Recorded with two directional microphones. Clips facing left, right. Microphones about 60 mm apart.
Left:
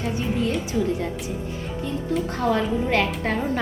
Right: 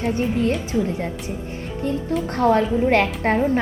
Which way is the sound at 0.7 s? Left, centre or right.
Right.